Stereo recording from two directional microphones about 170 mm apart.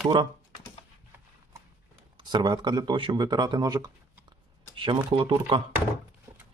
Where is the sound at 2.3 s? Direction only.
25° right (ahead or behind).